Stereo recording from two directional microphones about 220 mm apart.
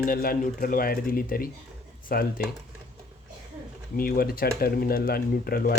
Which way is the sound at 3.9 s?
40° left (ahead or behind).